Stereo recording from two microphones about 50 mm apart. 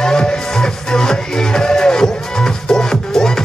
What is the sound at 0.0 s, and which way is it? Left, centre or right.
Music, centre.